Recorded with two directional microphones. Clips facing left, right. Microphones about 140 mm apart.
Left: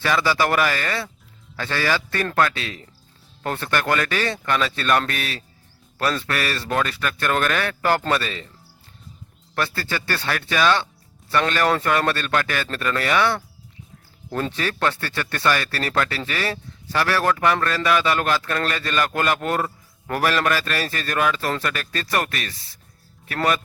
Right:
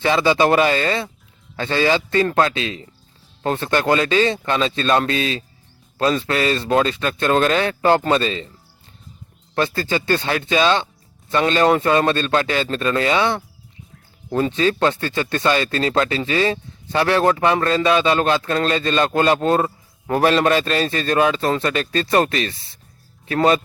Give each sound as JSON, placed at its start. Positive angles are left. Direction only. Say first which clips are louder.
{"t": 0.0, "sound": "speech", "louder": "right 5 dB", "side_deg": -20}
{"t": 9.6, "sound": "speech", "louder": "right 5 dB", "side_deg": -20}
{"t": 14.5, "sound": "speech", "louder": "right 6 dB", "side_deg": -20}